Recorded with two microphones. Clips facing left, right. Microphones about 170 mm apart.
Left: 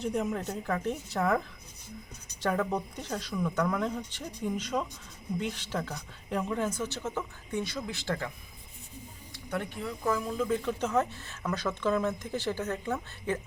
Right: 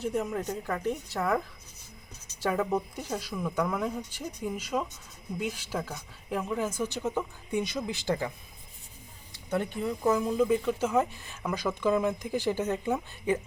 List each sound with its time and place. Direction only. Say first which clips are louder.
0.0 s a woman's voice: right 1 dB; centre (ahead or behind)
2.4 s speech: right 1 dB; 5° right (ahead or behind)
9.5 s speech: right 5 dB; 20° right (ahead or behind)
10.6 s speech: right 2 dB; 5° right (ahead or behind)